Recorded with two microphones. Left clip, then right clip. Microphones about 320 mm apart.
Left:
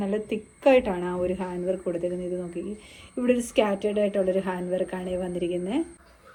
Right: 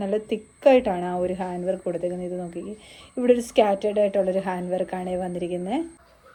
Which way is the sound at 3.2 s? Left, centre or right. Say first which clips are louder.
Right 4 dB; right.